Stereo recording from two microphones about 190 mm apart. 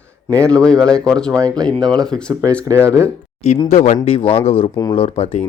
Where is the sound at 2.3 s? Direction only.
20° right (ahead or behind).